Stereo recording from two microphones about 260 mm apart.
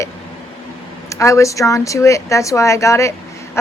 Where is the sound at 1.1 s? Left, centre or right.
Centre.